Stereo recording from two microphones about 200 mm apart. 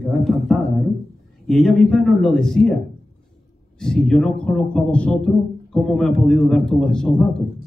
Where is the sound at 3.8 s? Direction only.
5° left (ahead or behind).